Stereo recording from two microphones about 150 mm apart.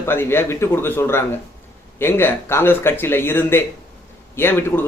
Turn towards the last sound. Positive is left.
turn(degrees=15)  # may be behind; listen again after turning